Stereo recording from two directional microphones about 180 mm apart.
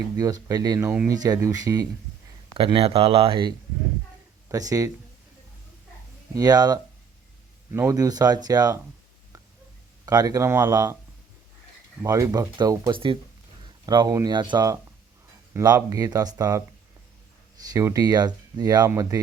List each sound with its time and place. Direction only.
0.2 s speech: 20° right (ahead or behind)
2.6 s speech: 30° right (ahead or behind)
6.3 s speech: 20° right (ahead or behind)
10.1 s speech: 20° right (ahead or behind)
12.0 s speech: 20° right (ahead or behind)
17.7 s speech: 20° right (ahead or behind)